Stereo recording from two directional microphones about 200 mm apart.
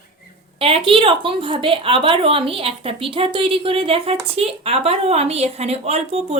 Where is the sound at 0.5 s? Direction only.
30° right (ahead or behind).